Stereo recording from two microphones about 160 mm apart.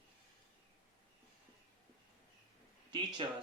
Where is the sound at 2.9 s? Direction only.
30° right (ahead or behind).